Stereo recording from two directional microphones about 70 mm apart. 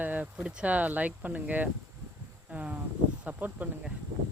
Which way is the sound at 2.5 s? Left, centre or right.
Right.